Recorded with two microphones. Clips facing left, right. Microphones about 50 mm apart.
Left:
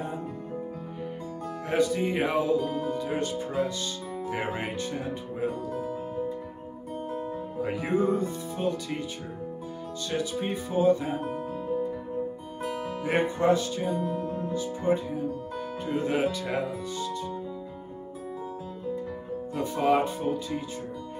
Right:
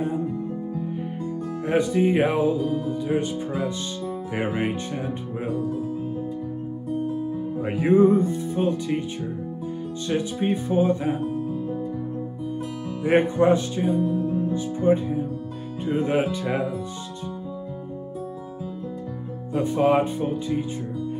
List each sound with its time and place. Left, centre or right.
1.7 s speech: right
3.1 s speech: centre
4.3 s speech: right
7.6 s speech: right
10.0 s speech: right
13.0 s speech: right
14.0 s music: left
14.5 s speech: right
19.5 s speech: right